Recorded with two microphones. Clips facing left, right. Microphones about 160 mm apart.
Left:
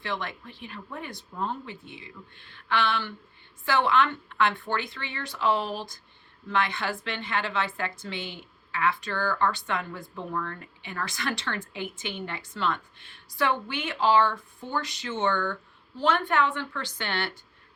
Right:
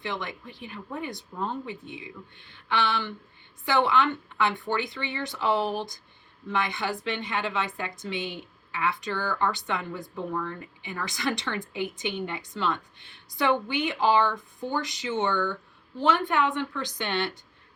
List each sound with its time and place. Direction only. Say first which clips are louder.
0.0 s a woman's voice: even; 15° right (ahead or behind)